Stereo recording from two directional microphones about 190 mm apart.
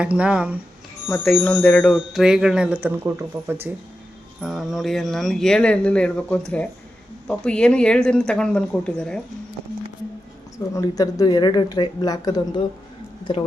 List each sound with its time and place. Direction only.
0.0 s speech: 5° right (ahead or behind)
10.8 s speech: 20° left (ahead or behind)